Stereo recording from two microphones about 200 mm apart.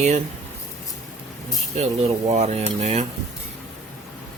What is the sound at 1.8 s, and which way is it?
Speech, 35° right (ahead or behind).